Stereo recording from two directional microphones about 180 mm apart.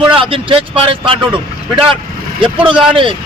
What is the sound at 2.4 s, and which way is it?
Speech, 30° right (ahead or behind).